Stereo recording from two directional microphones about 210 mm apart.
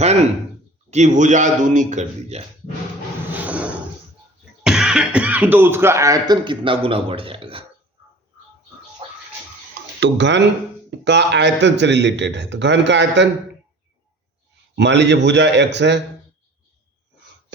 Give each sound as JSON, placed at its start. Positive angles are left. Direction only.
{"t": 0.9, "sound": "a man's voice", "side_deg": -35}
{"t": 3.3, "sound": "a sound", "side_deg": -5}
{"t": 4.6, "sound": "speech", "side_deg": -5}
{"t": 9.0, "sound": "music", "side_deg": -30}
{"t": 10.0, "sound": "a man's voice", "side_deg": -55}
{"t": 14.8, "sound": "a man's voice", "side_deg": -55}